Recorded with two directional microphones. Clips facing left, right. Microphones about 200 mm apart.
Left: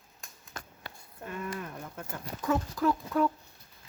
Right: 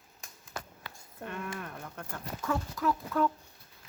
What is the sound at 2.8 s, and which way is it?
Speech, 30° left (ahead or behind).